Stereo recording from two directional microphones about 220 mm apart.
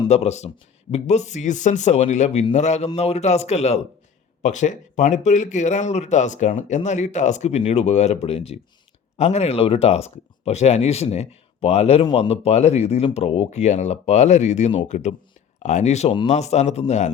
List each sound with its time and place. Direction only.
0.1 s speech: 30° left (ahead or behind)